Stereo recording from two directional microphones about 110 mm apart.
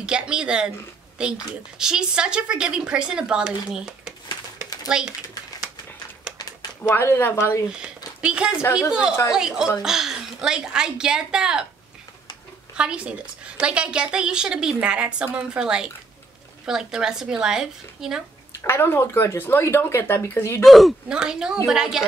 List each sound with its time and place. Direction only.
0.0 s a woman's voice: 10° right (ahead or behind)
6.3 s a sound: 10° right (ahead or behind)
6.8 s speech: 20° left (ahead or behind)
8.2 s a woman's voice: 10° right (ahead or behind)
12.7 s a woman's voice: 10° right (ahead or behind)
18.6 s speech: 20° left (ahead or behind)
20.6 s a woman's voice: centre (ahead or behind)